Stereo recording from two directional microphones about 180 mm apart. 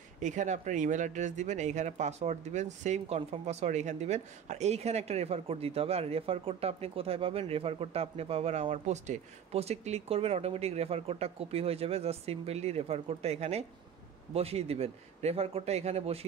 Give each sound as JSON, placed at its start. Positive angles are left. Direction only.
{"t": 0.2, "sound": "speech", "side_deg": -40}